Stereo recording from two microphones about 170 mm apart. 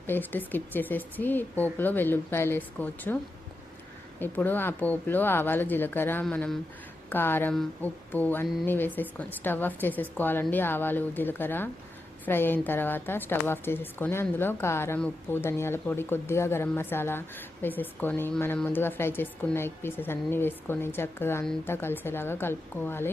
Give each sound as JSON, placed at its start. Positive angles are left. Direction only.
{"t": 0.1, "sound": "a woman's voice", "side_deg": 10}
{"t": 4.2, "sound": "a woman's voice", "side_deg": 10}